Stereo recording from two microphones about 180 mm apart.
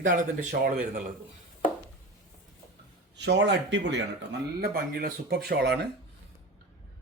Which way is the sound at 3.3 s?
75° right (ahead or behind).